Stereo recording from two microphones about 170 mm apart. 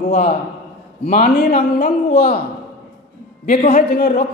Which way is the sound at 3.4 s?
45° left (ahead or behind).